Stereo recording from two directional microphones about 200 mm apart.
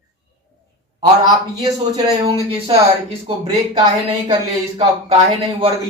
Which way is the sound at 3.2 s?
30° right (ahead or behind).